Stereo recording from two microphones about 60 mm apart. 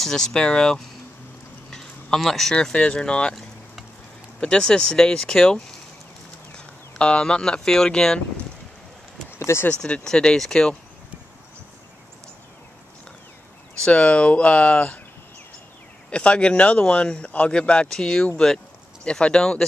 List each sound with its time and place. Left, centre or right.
0.0 s a man's voice: centre
1.7 s a sound: centre
2.5 s a man's voice: centre
4.4 s a man's voice: centre
9.4 s speech: left
9.8 s a man's voice: centre
13.8 s speech: centre
16.1 s a man's voice: centre